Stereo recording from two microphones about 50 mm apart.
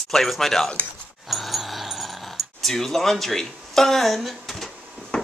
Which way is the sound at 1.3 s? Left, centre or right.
Centre.